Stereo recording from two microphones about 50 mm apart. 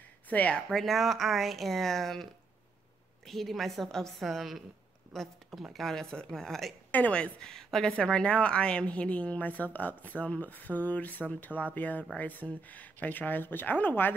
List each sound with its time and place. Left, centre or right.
0.3 s a woman's voice: left
0.7 s speech: centre
3.3 s speech: centre
5.9 s speech: centre
7.1 s speech: centre
8.0 s a woman's voice: left